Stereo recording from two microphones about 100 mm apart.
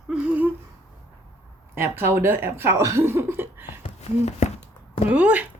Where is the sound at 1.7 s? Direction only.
25° right (ahead or behind).